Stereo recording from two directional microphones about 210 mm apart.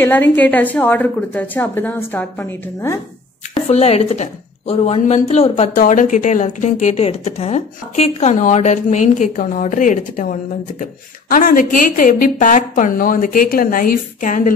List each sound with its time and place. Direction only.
0.0 s a woman's voice: 10° left (ahead or behind)
3.6 s a woman's voice: 30° left (ahead or behind)